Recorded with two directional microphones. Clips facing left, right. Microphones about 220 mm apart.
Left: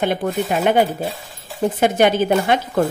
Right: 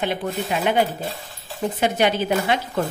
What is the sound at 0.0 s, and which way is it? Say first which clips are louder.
Speech: left 5 dB; 50° left (ahead or behind).